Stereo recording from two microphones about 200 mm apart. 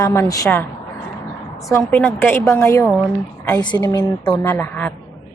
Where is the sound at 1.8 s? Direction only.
10° left (ahead or behind).